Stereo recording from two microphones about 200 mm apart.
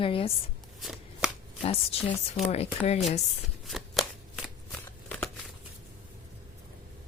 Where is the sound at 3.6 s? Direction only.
Centre (ahead or behind).